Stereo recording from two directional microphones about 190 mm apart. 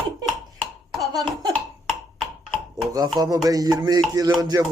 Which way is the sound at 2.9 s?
20° right (ahead or behind).